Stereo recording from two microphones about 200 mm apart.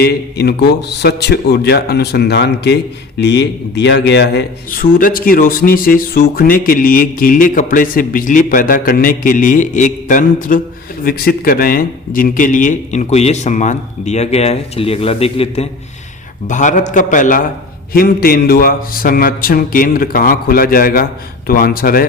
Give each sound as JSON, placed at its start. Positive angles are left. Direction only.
{"t": 0.0, "sound": "a man's voice", "side_deg": 55}